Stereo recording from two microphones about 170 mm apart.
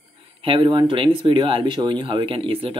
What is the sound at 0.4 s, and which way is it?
Speech, 30° right (ahead or behind).